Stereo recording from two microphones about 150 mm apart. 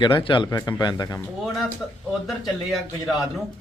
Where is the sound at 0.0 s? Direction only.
35° left (ahead or behind).